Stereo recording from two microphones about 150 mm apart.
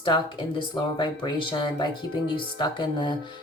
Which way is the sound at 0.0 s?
30° left (ahead or behind).